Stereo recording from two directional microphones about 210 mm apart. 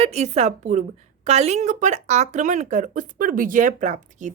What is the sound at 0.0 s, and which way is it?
A woman's voice, 30° right (ahead or behind).